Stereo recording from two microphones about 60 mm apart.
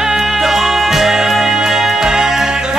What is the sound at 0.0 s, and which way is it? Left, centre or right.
Music, centre.